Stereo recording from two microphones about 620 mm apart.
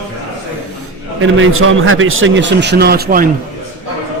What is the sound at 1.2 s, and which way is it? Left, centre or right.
A man's voice, centre.